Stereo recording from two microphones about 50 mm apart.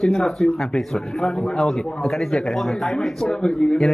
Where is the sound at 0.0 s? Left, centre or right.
Centre.